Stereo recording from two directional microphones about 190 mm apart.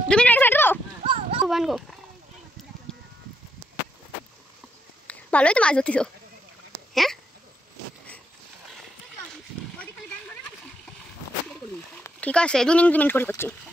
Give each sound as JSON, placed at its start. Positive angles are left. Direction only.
{"t": 0.1, "sound": "a sound", "side_deg": 5}
{"t": 1.0, "sound": "a sound", "side_deg": -30}
{"t": 1.5, "sound": "speech", "side_deg": 0}
{"t": 2.9, "sound": "sheep", "side_deg": 5}
{"t": 5.0, "sound": "a woman's voice", "side_deg": 5}
{"t": 6.9, "sound": "hiccup", "side_deg": 0}
{"t": 12.0, "sound": "speech", "side_deg": 5}